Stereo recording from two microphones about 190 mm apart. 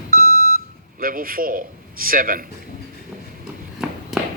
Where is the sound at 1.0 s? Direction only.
50° right (ahead or behind).